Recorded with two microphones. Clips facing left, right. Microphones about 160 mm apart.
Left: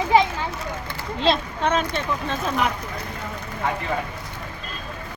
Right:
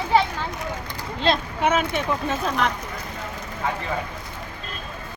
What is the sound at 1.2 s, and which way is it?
Speech, 5° right (ahead or behind).